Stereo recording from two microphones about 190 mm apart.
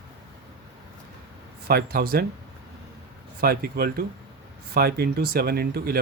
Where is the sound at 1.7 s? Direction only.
55° right (ahead or behind).